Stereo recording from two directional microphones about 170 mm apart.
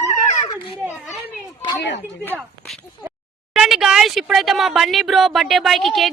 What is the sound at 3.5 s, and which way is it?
Speech, 5° right (ahead or behind).